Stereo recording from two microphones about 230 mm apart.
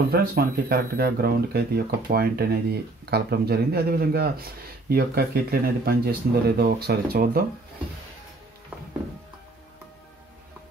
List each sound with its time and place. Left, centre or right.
0.1 s speech: right